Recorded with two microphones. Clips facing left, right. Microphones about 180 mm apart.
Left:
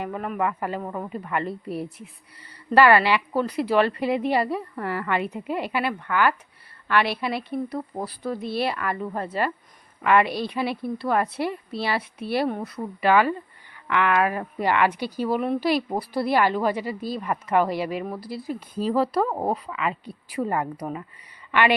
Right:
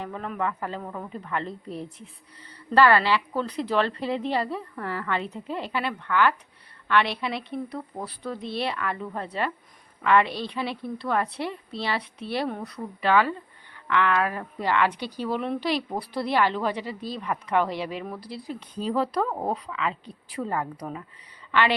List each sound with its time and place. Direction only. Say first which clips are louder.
0.0 s a woman's voice: left 3 dB; 10° left (ahead or behind)
0.9 s speech: left 4 dB; 25° left (ahead or behind)
1.1 s a woman's voice: left 2 dB; 10° left (ahead or behind)
19.3 s speech: left 3 dB; 20° left (ahead or behind)
19.6 s a woman's voice: left 2 dB; 5° left (ahead or behind)